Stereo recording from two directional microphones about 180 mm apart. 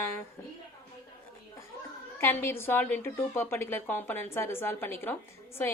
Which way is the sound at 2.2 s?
15° left (ahead or behind).